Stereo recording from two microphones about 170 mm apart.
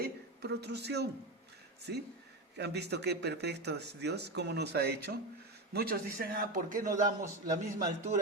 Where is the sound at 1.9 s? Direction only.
80° right.